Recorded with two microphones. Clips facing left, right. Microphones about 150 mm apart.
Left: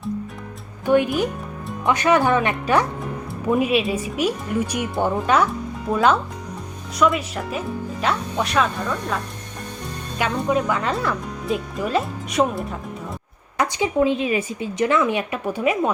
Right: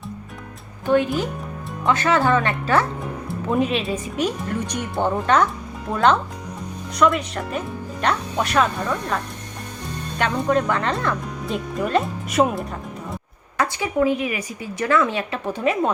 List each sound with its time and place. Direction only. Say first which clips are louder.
0.9 s speech: left 1 dB; 15° left (ahead or behind)
10.2 s speech: right 1 dB; 5° left (ahead or behind)
13.6 s a woman's voice: left 1 dB; 20° left (ahead or behind)